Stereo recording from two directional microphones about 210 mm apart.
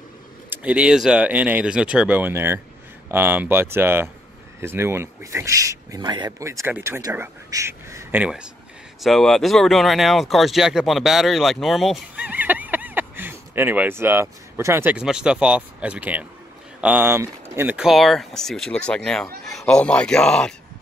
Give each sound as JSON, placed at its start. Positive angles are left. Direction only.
{"t": 0.5, "sound": "speech", "side_deg": -5}